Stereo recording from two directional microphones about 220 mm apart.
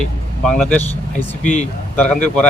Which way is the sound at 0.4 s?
5° left (ahead or behind).